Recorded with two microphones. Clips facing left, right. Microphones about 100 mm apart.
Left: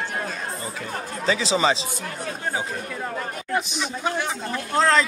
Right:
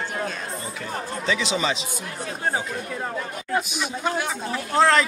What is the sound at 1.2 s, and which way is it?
Speech, 35° left (ahead or behind).